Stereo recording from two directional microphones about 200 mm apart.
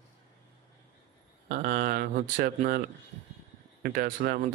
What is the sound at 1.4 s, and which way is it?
Speech, 45° right (ahead or behind).